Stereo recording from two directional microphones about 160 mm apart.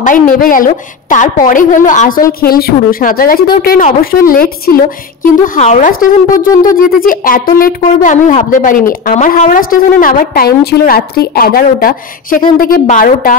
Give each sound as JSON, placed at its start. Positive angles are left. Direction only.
{"t": 0.0, "sound": "a woman's voice", "side_deg": 55}
{"t": 2.4, "sound": "a woman's voice", "side_deg": 70}
{"t": 5.2, "sound": "a woman's voice", "side_deg": 50}